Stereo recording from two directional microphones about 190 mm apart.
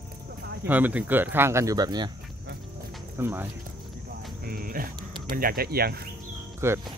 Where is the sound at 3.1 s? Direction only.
10° right (ahead or behind).